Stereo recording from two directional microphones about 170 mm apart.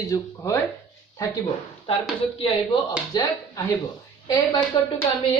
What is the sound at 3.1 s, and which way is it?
Speech, 25° left (ahead or behind).